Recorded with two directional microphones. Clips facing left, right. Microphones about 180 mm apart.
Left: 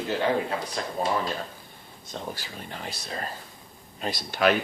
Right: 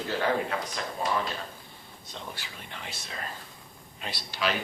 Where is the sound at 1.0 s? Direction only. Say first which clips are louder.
Left 3 dB; 40° left (ahead or behind).